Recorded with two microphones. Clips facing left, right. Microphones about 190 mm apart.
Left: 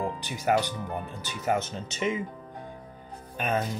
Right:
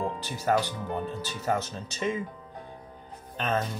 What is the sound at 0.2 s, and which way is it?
Speech, 15° left (ahead or behind).